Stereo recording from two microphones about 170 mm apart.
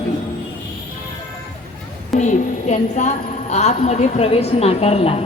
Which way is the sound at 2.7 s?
45° left (ahead or behind).